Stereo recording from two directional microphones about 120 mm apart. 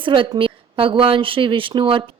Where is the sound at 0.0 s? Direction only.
45° right (ahead or behind).